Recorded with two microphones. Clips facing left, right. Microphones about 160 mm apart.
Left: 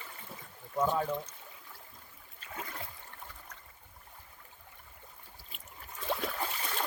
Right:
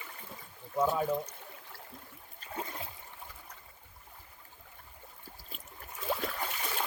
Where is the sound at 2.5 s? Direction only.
25° right (ahead or behind).